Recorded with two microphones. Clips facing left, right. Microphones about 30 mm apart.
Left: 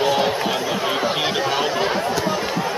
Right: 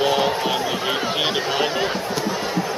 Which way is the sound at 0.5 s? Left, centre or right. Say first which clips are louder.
Left 1 dB; centre.